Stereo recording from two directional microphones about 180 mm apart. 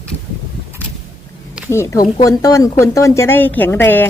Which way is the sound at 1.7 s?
15° left (ahead or behind).